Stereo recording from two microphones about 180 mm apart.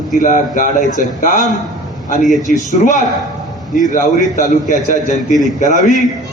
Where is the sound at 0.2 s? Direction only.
45° left (ahead or behind).